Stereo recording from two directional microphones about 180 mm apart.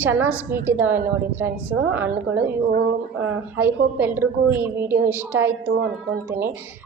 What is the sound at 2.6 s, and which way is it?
Speech, 60° right (ahead or behind).